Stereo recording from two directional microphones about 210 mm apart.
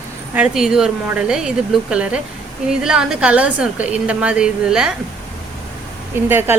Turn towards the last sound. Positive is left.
turn(degrees=-10)  # may be behind; listen again after turning